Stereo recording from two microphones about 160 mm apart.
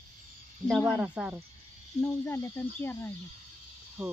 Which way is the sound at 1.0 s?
10° right (ahead or behind).